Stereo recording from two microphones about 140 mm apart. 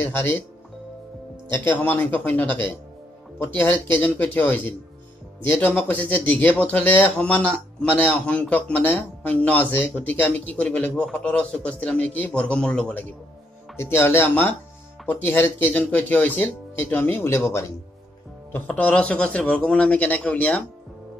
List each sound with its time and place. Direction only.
0.0 s speech: 15° left (ahead or behind)
1.5 s speech: 15° left (ahead or behind)